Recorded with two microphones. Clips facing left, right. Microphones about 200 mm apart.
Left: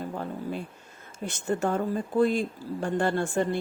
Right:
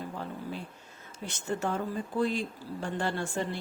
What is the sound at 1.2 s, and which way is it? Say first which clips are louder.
Speech: left 5 dB; 50° left (ahead or behind).